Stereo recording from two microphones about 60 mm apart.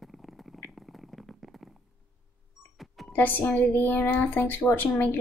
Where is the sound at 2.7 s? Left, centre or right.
Centre.